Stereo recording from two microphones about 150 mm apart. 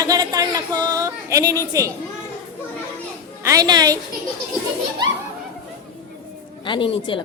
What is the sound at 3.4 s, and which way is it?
Speech, 25° right (ahead or behind).